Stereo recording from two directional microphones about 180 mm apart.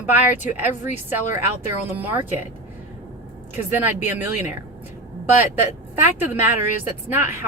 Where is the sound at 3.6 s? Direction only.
10° right (ahead or behind).